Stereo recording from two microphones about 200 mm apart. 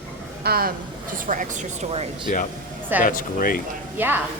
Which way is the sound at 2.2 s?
40° left (ahead or behind).